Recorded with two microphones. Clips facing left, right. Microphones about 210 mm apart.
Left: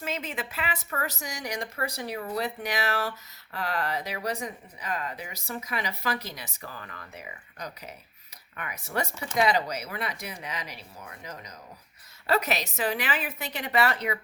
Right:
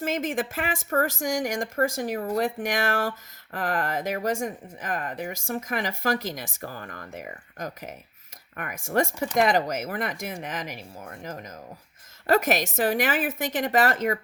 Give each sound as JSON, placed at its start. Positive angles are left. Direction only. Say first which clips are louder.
{"t": 0.0, "sound": "speech", "louder": "right 7 dB", "side_deg": -45}